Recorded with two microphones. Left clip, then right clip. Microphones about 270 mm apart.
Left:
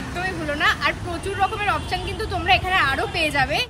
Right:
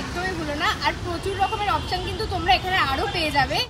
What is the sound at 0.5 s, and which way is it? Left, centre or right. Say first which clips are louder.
Speech: left 4 dB; centre.